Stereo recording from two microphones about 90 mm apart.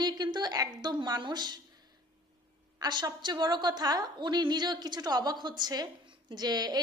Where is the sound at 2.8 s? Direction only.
55° right (ahead or behind).